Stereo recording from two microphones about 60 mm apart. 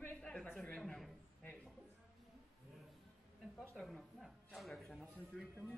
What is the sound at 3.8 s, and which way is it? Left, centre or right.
Speech, centre.